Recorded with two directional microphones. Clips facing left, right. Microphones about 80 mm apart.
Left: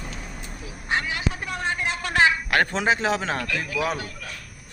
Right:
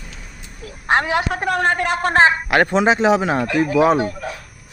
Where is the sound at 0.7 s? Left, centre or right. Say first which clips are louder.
Right 9 dB; right.